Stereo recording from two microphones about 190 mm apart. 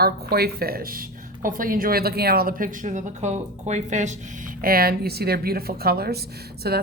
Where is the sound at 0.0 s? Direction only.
55° right (ahead or behind); by 4.1 s 40° right (ahead or behind).